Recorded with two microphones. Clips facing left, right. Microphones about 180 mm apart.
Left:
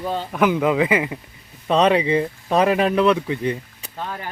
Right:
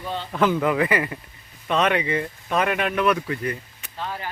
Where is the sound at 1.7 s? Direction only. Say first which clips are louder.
Left 5 dB; 30° left (ahead or behind).